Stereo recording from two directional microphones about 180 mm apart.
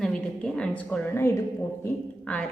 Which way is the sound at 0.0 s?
5° left (ahead or behind).